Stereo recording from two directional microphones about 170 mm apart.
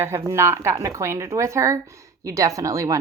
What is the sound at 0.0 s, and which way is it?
A woman's voice, 15° right (ahead or behind).